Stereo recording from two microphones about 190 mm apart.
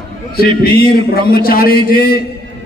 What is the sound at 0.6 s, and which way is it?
A man's voice, 55° left (ahead or behind).